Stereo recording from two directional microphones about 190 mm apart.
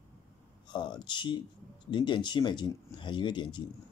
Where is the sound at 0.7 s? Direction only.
25° left (ahead or behind).